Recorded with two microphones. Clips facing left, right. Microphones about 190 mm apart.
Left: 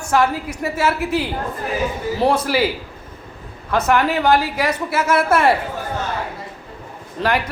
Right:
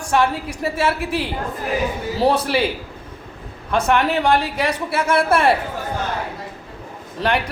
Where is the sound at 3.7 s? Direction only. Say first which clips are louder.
Left 1 dB; 25° right (ahead or behind).